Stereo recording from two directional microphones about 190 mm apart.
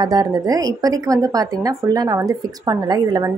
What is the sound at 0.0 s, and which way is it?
A woman's voice, 20° right (ahead or behind).